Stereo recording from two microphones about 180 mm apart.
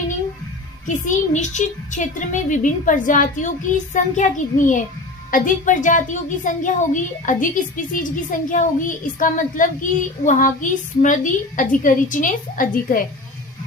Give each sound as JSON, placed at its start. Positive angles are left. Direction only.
{"t": 0.9, "sound": "a child's voice", "side_deg": 45}